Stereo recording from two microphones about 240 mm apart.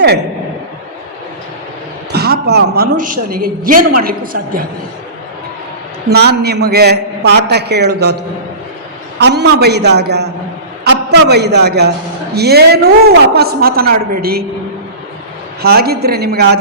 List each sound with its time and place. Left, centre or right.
2.1 s a woman's voice: right
6.1 s a man's voice: right
15.6 s a woman's voice: right